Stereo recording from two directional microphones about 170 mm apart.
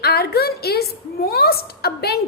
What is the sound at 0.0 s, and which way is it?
A woman's voice, 70° left (ahead or behind).